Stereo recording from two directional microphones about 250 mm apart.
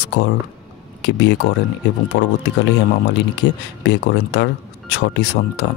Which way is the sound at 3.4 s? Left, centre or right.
Left.